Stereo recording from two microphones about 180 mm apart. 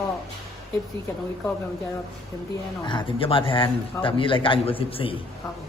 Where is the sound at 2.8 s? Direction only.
25° left (ahead or behind).